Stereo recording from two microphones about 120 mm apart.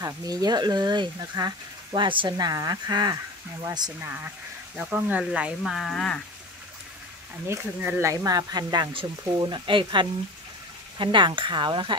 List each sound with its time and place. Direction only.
0.0 s speech: 30° right (ahead or behind)
2.3 s speech: 30° right (ahead or behind)
4.0 s speech: 15° right (ahead or behind); by 6.2 s 5° left (ahead or behind)
7.4 s speech: 20° right (ahead or behind); by 12.0 s 40° right (ahead or behind)